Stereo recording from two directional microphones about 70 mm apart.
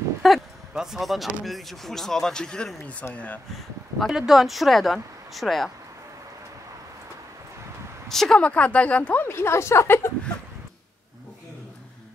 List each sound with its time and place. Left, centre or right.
0.2 s a sound: centre
0.7 s speech: centre
4.1 s speech: centre
8.1 s speech: centre
8.4 s speech: centre
9.2 s a woman's voice: left